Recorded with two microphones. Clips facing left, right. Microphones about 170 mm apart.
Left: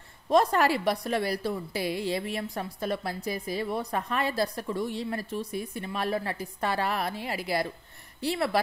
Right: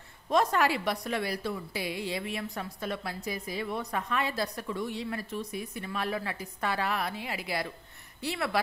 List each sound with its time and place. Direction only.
0.3 s a woman's voice: 35° left (ahead or behind)